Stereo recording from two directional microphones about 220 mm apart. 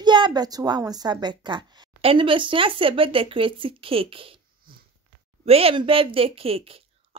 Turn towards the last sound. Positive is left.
turn(degrees=-25)  # may be behind; listen again after turning